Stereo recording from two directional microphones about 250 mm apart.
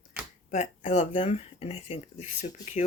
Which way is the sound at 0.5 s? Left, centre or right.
Left.